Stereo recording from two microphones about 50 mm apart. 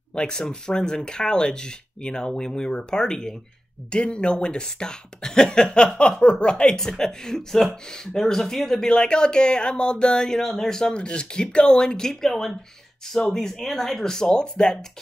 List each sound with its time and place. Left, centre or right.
0.1 s speech: centre
5.9 s a sound: centre
6.4 s speech: centre